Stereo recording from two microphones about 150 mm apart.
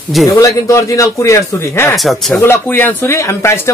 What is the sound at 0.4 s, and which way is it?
Speech, 20° left (ahead or behind).